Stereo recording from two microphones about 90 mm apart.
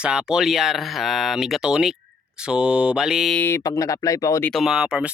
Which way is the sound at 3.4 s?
30° left (ahead or behind).